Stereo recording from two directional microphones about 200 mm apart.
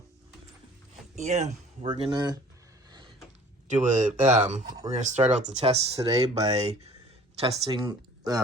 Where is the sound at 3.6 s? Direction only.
35° right (ahead or behind).